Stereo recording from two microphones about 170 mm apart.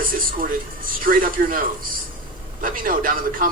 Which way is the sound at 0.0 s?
55° right (ahead or behind).